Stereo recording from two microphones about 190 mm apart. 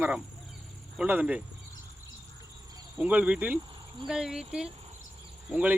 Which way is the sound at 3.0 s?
10° right (ahead or behind).